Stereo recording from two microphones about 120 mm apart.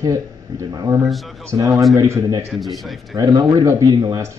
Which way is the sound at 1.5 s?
30° right (ahead or behind).